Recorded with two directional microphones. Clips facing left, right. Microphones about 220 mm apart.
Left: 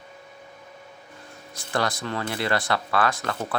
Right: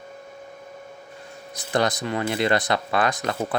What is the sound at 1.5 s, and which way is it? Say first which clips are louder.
Speech: right 4 dB; 20° right (ahead or behind).